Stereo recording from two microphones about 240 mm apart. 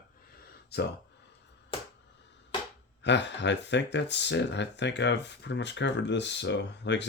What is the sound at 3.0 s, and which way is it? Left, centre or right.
Speech, left.